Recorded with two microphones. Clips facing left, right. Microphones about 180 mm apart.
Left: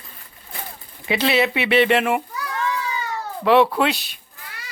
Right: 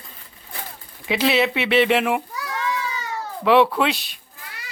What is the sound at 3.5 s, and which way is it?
Speech, centre (ahead or behind).